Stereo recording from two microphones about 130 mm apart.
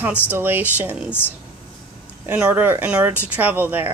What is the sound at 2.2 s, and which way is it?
Speech, 15° right (ahead or behind).